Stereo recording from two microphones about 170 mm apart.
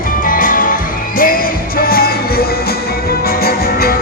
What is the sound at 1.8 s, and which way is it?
Music, 60° left (ahead or behind).